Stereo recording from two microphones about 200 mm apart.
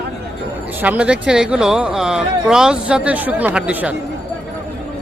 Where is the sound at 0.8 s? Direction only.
5° right (ahead or behind).